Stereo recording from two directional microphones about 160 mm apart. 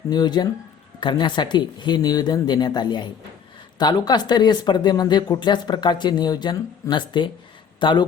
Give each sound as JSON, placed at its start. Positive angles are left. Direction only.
{"t": 0.1, "sound": "speech", "side_deg": 25}